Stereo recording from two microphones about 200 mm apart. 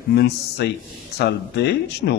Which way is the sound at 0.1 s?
55° left (ahead or behind).